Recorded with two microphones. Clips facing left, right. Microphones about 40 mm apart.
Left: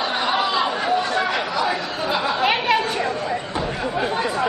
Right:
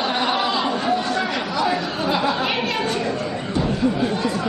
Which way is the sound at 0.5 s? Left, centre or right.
Centre.